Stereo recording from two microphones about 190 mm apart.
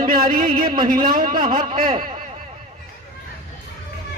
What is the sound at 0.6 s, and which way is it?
Speech, 25° right (ahead or behind).